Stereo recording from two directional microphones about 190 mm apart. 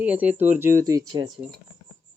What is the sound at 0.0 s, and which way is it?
Speech, 10° right (ahead or behind).